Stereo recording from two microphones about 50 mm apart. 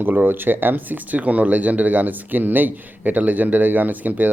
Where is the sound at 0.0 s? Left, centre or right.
Right.